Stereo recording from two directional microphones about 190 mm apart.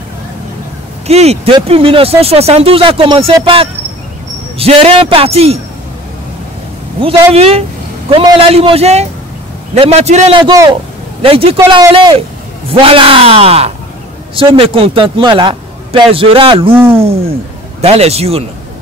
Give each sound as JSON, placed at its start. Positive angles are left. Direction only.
{"t": 1.0, "sound": "speech", "side_deg": -35}
{"t": 7.0, "sound": "a man's voice", "side_deg": -30}
{"t": 16.7, "sound": "speech", "side_deg": -10}
{"t": 17.8, "sound": "speech", "side_deg": -35}